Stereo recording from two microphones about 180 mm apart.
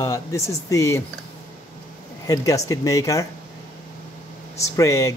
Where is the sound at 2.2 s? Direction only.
20° left (ahead or behind).